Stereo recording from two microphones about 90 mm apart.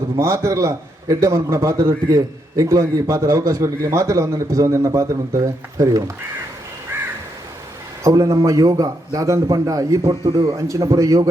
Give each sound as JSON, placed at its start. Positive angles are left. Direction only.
{"t": 0.2, "sound": "a man's voice", "side_deg": -35}
{"t": 6.9, "sound": "crow", "side_deg": -25}
{"t": 8.0, "sound": "a man's voice", "side_deg": -40}